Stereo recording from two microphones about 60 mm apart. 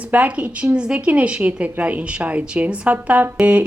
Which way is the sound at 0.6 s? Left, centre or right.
Centre.